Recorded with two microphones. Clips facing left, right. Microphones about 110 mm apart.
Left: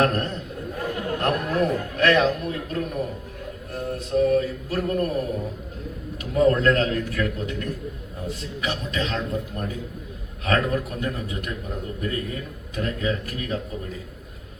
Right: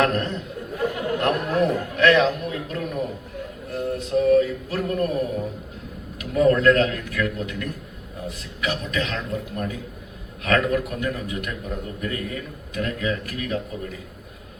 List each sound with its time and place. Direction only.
0.0 s a man's voice: 40° left (ahead or behind)
2.4 s a sound: 40° left (ahead or behind)
4.4 s a man's voice: 40° left (ahead or behind)
6.3 s a man's voice: 35° left (ahead or behind)